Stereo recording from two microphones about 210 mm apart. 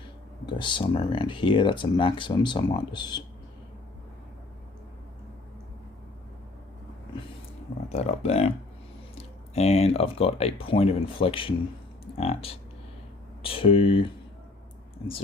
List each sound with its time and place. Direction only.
0.4 s speech: 20° left (ahead or behind)
7.9 s speech: 30° left (ahead or behind)
15.0 s speech: 20° left (ahead or behind)